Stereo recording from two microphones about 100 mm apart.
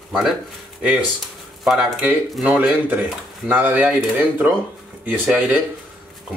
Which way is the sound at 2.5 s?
10° right (ahead or behind).